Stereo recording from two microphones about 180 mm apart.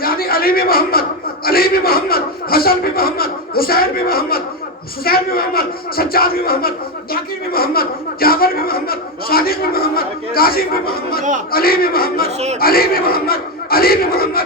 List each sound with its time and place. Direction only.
0.0 s a man's voice: 55° left (ahead or behind)